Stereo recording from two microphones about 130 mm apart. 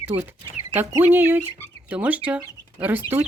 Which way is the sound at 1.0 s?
15° right (ahead or behind).